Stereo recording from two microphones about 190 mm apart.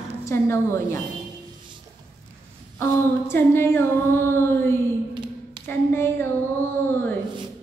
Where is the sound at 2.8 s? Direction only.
15° left (ahead or behind).